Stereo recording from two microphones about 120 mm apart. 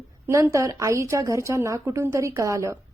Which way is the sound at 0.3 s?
25° right (ahead or behind).